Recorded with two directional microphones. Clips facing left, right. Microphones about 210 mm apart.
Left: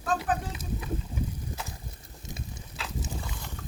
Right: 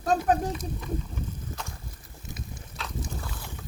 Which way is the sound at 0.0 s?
40° right (ahead or behind).